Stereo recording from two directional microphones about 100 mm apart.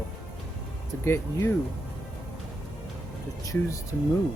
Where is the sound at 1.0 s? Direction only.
25° left (ahead or behind).